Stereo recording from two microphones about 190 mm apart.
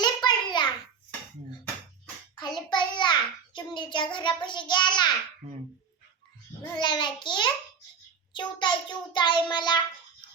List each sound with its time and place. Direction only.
0.0 s a sound: 20° left (ahead or behind)
2.3 s a child's voice: 20° left (ahead or behind)
6.6 s child singing: 25° left (ahead or behind)